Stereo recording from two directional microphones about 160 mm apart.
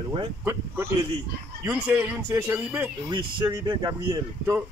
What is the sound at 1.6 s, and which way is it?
A man's voice, 15° right (ahead or behind).